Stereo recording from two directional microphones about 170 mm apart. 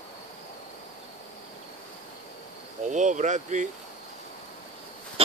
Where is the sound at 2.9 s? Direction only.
45° right (ahead or behind).